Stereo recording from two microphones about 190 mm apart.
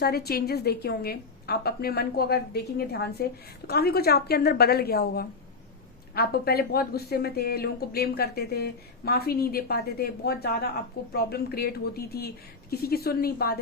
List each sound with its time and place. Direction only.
0.0 s speech: 55° left (ahead or behind)